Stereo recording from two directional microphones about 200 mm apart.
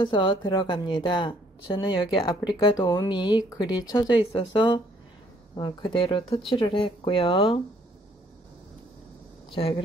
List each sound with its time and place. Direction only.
0.0 s speech: 25° left (ahead or behind)